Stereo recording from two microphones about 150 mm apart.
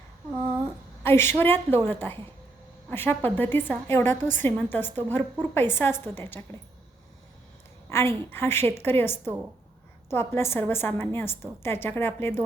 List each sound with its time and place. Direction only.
1.0 s a woman's voice: 15° left (ahead or behind)
7.9 s a woman's voice: 15° left (ahead or behind)